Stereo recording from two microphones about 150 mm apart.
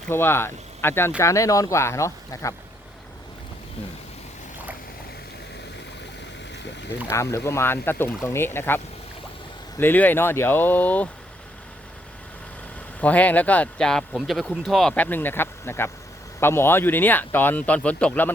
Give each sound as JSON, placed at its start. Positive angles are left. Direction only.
{"t": 0.1, "sound": "speech", "side_deg": 15}
{"t": 7.1, "sound": "speech", "side_deg": 20}
{"t": 13.0, "sound": "speech", "side_deg": 10}